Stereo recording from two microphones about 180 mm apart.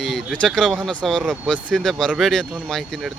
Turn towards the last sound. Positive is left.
turn(degrees=0)  # may be behind; listen again after turning